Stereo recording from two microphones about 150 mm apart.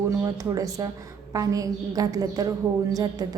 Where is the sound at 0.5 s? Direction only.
25° right (ahead or behind).